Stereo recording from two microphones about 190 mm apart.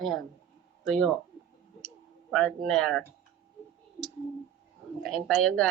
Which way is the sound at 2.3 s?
Centre (ahead or behind).